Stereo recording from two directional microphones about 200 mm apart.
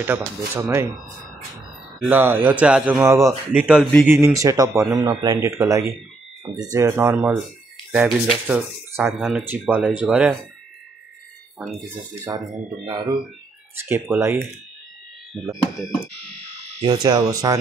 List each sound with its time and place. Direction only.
0.6 s a man's voice: 15° right (ahead or behind)
2.0 s a man's voice: 10° right (ahead or behind)
3.6 s a man's voice: 5° right (ahead or behind)
11.5 s speech: centre (ahead or behind)
12.8 s speech: 20° right (ahead or behind)
13.7 s a man's voice: 10° right (ahead or behind)
16.8 s speech: 20° right (ahead or behind)